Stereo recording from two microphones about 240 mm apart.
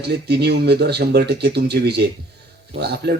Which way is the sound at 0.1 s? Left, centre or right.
Right.